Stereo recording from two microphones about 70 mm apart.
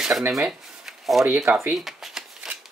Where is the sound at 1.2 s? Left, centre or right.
Right.